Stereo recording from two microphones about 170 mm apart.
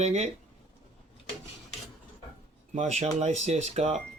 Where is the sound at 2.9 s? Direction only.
40° right (ahead or behind).